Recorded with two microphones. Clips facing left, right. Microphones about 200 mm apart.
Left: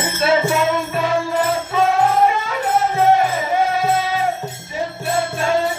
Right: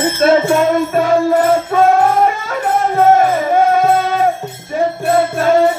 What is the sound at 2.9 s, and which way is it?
Music, 50° right (ahead or behind).